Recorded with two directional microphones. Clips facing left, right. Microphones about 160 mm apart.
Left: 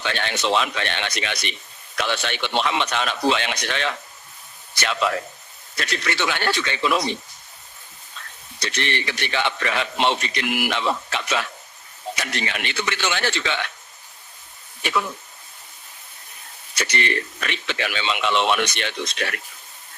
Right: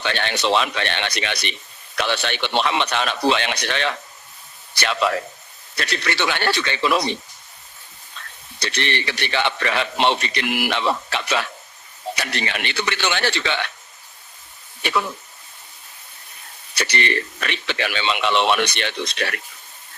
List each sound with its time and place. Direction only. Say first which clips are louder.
0.0 s speech: right 2 dB; 70° right (ahead or behind)
8.6 s speech: right 1 dB; 70° right (ahead or behind)
16.7 s speech: right 1 dB; 65° right (ahead or behind)